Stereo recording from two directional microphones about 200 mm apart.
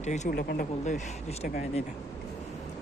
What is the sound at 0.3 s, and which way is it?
Speech, 50° left (ahead or behind).